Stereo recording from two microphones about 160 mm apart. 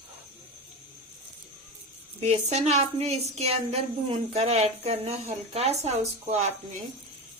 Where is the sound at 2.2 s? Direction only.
45° right (ahead or behind).